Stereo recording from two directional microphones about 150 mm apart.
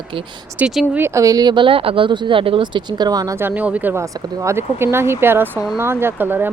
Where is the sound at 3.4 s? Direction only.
10° right (ahead or behind).